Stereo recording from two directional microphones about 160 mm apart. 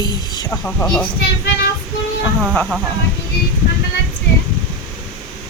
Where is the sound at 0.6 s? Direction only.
5° left (ahead or behind).